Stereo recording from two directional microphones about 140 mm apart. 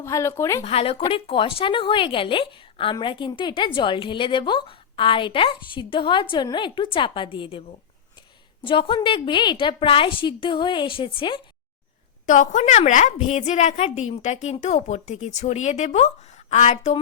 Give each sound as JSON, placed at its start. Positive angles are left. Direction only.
{"t": 0.0, "sound": "speech", "side_deg": 20}
{"t": 0.6, "sound": "a woman's voice", "side_deg": 45}
{"t": 8.6, "sound": "a woman's voice", "side_deg": 35}
{"t": 12.2, "sound": "a woman's voice", "side_deg": 60}